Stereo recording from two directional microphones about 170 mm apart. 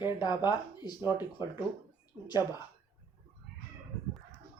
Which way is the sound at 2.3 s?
25° left (ahead or behind).